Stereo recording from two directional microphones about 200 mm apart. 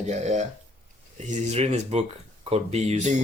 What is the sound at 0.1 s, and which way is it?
Speech, 35° right (ahead or behind).